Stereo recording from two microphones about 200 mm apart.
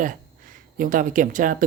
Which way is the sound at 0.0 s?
45° right (ahead or behind).